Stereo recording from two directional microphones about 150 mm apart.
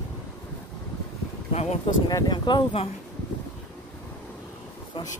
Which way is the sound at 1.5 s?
45° left (ahead or behind).